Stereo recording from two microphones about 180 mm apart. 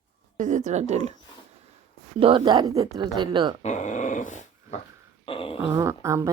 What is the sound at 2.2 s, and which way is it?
Speech, 30° right (ahead or behind).